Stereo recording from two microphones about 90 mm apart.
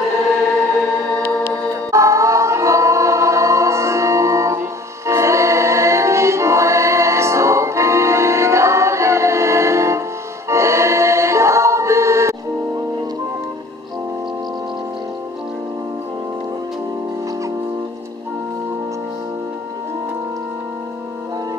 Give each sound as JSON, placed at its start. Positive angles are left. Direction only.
{"t": 1.9, "sound": "music", "side_deg": -35}